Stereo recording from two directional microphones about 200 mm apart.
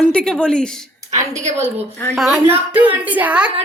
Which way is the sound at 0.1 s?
5° left (ahead or behind).